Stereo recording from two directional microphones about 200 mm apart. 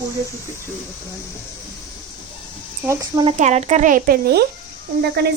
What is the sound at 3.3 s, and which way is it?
A woman's voice, 35° right (ahead or behind).